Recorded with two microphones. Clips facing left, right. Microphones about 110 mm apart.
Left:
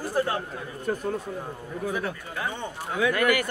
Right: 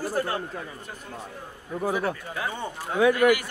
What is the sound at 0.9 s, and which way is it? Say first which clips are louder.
Speech: left 13 dB; 50° left (ahead or behind).